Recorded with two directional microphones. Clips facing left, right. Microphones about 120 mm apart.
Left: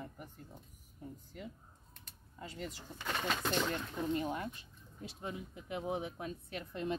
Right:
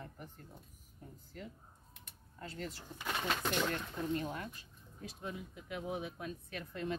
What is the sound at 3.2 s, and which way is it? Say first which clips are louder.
Speech: even; centre (ahead or behind).